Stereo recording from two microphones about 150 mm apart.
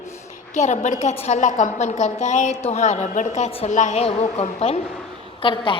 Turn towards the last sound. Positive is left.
turn(degrees=35)  # may be behind; listen again after turning